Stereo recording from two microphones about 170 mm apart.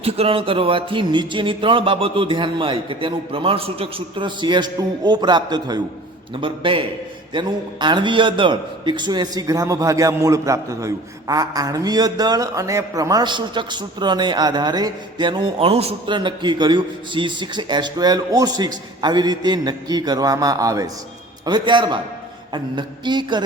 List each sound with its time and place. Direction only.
0.0 s a man's voice: 35° right (ahead or behind)